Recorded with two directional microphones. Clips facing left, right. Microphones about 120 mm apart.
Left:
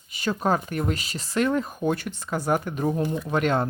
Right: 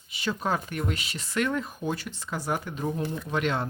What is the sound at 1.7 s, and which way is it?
Speech, 55° left (ahead or behind).